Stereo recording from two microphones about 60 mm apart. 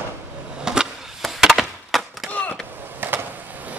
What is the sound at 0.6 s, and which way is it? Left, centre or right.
Skateboard, centre.